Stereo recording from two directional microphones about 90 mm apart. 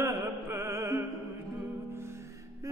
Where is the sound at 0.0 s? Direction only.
30° right (ahead or behind).